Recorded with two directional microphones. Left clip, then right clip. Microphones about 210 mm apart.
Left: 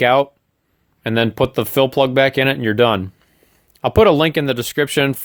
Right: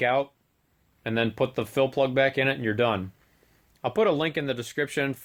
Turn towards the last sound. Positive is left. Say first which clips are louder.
# left 11 dB
turn(degrees=50)  # may be behind; listen again after turning